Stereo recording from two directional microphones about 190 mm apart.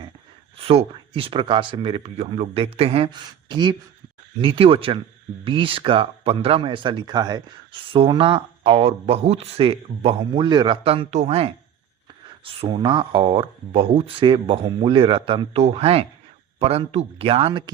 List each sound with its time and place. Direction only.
0.5 s speech: 30° right (ahead or behind)